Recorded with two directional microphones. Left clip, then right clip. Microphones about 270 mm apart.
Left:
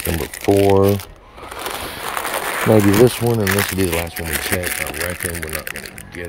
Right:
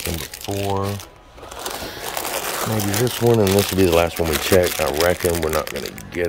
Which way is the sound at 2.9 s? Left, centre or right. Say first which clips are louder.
Left 4 dB; centre.